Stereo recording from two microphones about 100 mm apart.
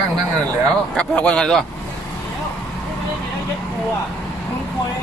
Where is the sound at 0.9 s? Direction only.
10° left (ahead or behind).